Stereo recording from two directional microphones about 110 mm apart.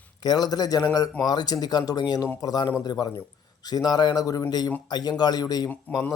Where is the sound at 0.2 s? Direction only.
40° left (ahead or behind).